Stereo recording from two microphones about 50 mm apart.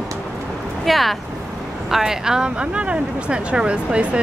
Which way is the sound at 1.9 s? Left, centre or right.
Centre.